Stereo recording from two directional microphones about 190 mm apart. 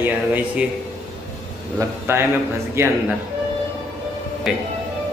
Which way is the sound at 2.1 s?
15° right (ahead or behind).